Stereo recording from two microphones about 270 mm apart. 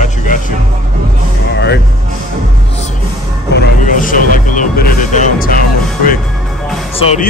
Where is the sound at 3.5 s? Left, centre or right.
Left.